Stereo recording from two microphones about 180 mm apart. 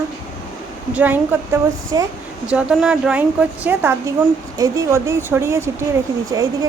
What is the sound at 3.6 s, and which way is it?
Child singing, 10° right (ahead or behind).